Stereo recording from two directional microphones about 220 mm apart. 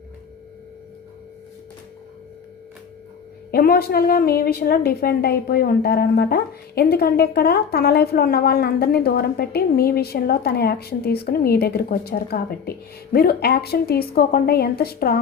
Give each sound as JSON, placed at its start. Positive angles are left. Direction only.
{"t": 3.5, "sound": "a woman's voice", "side_deg": 45}